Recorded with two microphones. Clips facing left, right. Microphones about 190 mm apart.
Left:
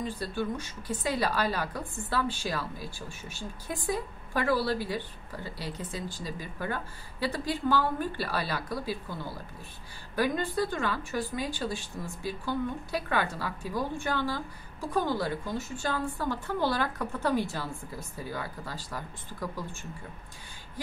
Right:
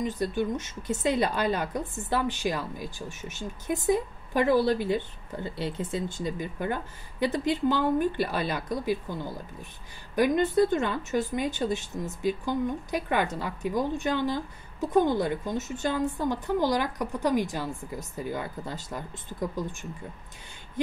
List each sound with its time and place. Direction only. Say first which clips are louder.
0.0 s speech: right 5 dB; 20° right (ahead or behind)